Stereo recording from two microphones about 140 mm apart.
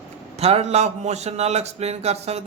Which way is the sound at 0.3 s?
50° right (ahead or behind).